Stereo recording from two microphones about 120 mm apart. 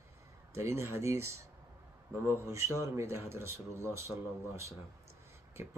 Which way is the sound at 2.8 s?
25° right (ahead or behind).